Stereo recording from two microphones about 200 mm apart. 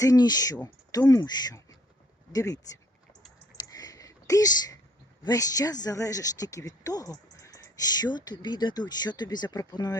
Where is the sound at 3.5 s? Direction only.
20° left (ahead or behind).